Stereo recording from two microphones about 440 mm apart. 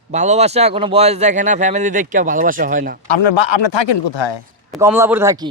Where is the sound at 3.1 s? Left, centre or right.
Left.